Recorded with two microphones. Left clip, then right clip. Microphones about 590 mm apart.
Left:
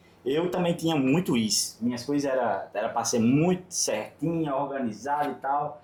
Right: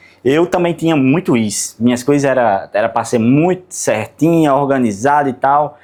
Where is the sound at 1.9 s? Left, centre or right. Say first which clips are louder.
Right 16 dB; right.